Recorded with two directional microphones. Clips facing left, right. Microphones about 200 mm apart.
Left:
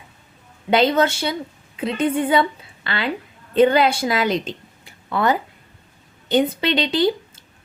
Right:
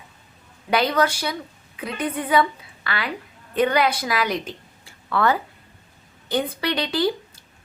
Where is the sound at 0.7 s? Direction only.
25° left (ahead or behind).